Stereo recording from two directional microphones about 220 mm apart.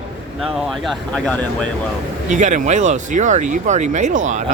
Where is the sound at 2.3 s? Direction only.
35° right (ahead or behind).